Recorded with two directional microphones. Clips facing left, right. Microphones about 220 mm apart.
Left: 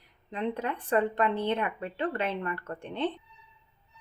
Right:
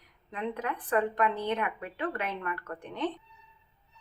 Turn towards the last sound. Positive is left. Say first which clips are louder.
# left 2 dB
turn(degrees=25)  # may be behind; listen again after turning